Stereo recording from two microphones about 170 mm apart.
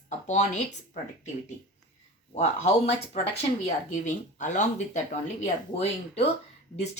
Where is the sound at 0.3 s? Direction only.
45° left (ahead or behind).